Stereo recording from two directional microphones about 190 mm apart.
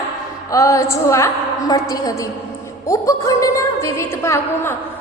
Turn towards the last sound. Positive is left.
turn(degrees=15)  # may be behind; listen again after turning